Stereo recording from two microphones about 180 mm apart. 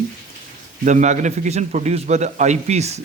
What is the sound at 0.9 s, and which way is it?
A man's voice, 40° right (ahead or behind).